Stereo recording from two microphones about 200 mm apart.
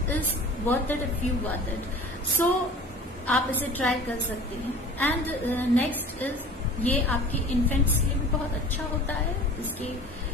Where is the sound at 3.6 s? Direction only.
10° left (ahead or behind).